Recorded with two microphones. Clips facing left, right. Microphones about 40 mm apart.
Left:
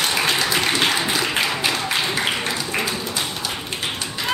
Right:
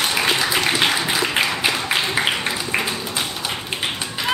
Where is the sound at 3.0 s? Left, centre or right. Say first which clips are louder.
Even; centre.